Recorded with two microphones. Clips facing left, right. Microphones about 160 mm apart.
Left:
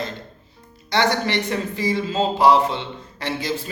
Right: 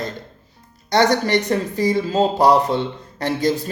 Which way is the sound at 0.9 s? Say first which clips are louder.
Right 4 dB; 40° right (ahead or behind).